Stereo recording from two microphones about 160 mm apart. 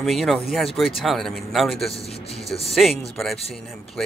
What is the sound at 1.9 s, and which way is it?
Speech, 40° left (ahead or behind).